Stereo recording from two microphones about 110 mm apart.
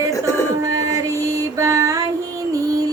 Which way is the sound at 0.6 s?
30° right (ahead or behind).